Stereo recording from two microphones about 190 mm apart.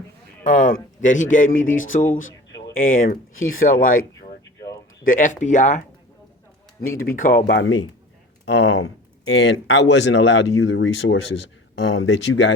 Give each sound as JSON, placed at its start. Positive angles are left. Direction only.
{"t": 0.4, "sound": "speech", "side_deg": 40}
{"t": 4.2, "sound": "a sound", "side_deg": 20}
{"t": 5.0, "sound": "speech", "side_deg": 45}
{"t": 6.8, "sound": "speech", "side_deg": 50}
{"t": 7.6, "sound": "a man's voice", "side_deg": 85}